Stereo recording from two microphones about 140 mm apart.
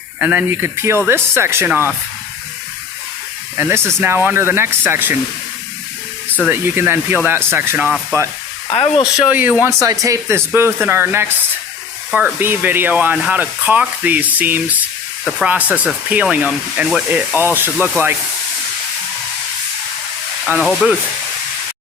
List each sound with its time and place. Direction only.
0.2 s speech: 10° right (ahead or behind)
4.0 s speech: 15° right (ahead or behind)
6.5 s speech: 15° right (ahead or behind)
8.7 s speech: 40° left (ahead or behind)
9.1 s speech: 10° right (ahead or behind)
9.6 s speech: 25° right (ahead or behind)
20.6 s sizzle: 5° left (ahead or behind)